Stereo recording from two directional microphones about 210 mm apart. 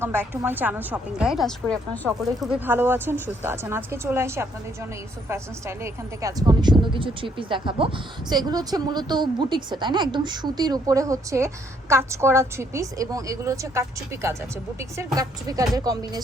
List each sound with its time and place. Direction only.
0.0 s a woman's voice: 10° right (ahead or behind)